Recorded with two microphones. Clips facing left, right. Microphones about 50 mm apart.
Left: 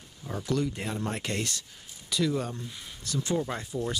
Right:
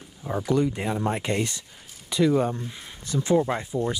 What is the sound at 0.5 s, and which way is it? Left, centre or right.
Speech, right.